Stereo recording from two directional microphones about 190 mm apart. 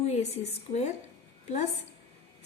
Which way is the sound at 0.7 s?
35° left (ahead or behind).